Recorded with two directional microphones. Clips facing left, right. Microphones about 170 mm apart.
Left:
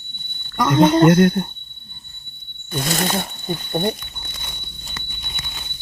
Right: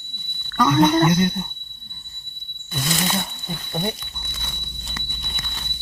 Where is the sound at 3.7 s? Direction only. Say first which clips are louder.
Left 4 dB; 40° left (ahead or behind).